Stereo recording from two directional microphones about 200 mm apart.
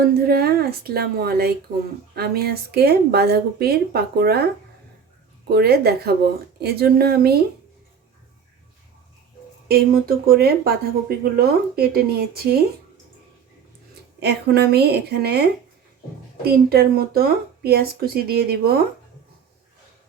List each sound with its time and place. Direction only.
0.0 s speech: 50° right (ahead or behind)
5.5 s speech: 50° right (ahead or behind)
9.6 s speech: 50° right (ahead or behind)
14.2 s speech: 55° right (ahead or behind)